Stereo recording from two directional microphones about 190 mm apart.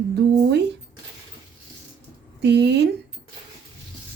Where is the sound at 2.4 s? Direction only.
60° right (ahead or behind).